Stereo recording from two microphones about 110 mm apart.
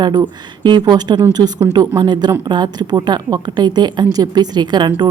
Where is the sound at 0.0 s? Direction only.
40° right (ahead or behind).